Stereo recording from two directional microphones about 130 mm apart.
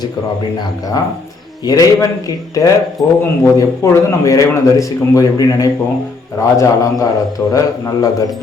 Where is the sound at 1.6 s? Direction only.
25° left (ahead or behind).